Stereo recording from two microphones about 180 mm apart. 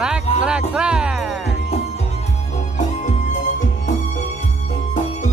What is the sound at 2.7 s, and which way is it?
Music, 45° left (ahead or behind).